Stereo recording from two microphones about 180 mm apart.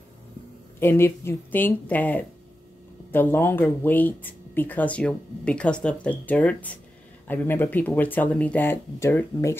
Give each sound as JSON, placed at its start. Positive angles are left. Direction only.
{"t": 0.7, "sound": "speech", "side_deg": 15}